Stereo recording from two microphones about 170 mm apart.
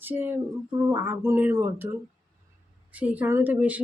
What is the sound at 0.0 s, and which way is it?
Speech, 10° right (ahead or behind).